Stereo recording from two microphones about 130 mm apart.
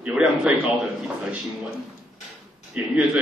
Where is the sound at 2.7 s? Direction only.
10° right (ahead or behind).